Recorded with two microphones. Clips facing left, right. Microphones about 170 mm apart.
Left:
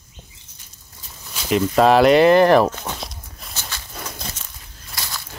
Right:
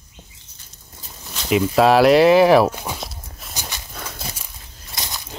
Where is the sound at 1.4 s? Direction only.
5° right (ahead or behind).